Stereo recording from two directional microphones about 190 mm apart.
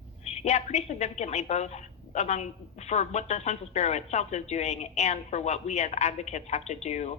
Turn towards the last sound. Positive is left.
turn(degrees=35)  # may be behind; listen again after turning